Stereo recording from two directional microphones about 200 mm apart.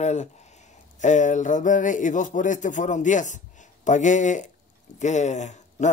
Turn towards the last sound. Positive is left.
turn(degrees=35)  # may be behind; listen again after turning